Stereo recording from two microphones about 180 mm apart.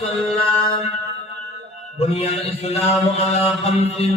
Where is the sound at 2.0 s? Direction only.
35° left (ahead or behind).